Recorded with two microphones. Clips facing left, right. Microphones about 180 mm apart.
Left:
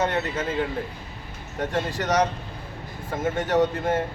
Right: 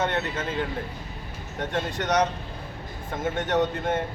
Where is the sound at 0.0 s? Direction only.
Centre (ahead or behind).